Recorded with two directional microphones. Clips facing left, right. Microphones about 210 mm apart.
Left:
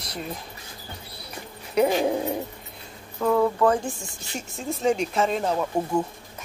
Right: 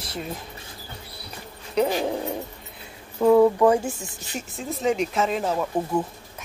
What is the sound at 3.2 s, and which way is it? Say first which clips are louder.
Speech: right 5 dB; 15° right (ahead or behind).